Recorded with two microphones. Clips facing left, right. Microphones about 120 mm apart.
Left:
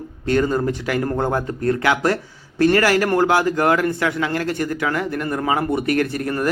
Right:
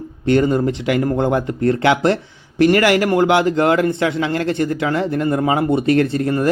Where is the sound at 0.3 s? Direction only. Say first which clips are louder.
Right 3 dB; 20° right (ahead or behind).